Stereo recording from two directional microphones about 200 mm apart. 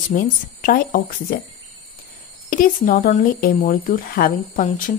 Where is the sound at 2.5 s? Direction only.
45° left (ahead or behind).